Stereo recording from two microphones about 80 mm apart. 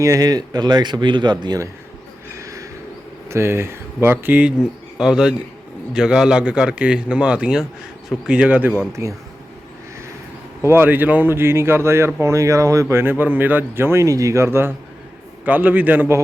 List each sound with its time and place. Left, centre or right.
0.0 s speech: right
2.3 s a sound: right
3.2 s speech: right
4.9 s a man's voice: centre
8.9 s speech: right
10.6 s speech: right
15.4 s speech: right